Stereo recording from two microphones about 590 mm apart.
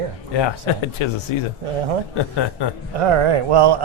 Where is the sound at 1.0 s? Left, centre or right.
Left.